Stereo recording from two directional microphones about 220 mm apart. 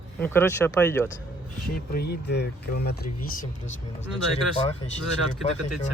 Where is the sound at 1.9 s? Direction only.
45° left (ahead or behind).